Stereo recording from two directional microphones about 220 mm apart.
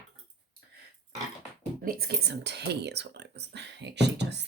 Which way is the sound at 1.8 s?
45° right (ahead or behind).